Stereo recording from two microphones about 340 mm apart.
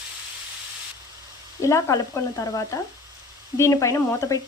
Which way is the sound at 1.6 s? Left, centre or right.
Centre.